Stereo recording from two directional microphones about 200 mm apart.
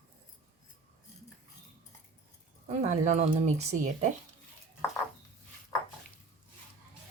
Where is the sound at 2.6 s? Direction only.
35° right (ahead or behind).